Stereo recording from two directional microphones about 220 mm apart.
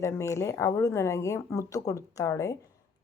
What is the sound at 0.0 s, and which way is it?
Speech, 15° left (ahead or behind).